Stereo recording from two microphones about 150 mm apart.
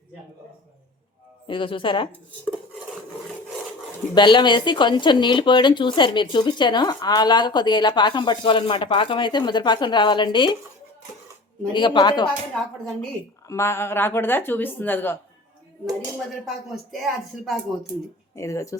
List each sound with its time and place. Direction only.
1.5 s speech: 35° left (ahead or behind)
4.1 s speech: 30° left (ahead or behind)
11.7 s speech: 30° left (ahead or behind)
13.5 s speech: 20° left (ahead or behind)
16.1 s a sound: centre (ahead or behind)
18.3 s speech: 20° left (ahead or behind)